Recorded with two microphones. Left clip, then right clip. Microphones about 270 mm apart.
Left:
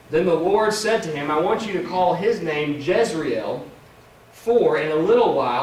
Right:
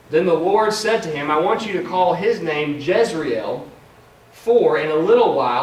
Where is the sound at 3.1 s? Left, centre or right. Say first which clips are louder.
Right 2 dB; centre.